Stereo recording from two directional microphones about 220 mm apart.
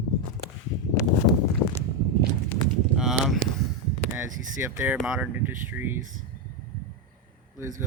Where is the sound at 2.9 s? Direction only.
Centre (ahead or behind).